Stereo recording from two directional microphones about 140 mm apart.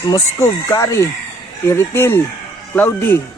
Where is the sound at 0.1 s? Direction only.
25° left (ahead or behind).